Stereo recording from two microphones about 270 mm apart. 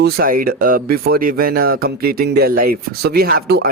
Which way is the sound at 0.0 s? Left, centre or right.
Right.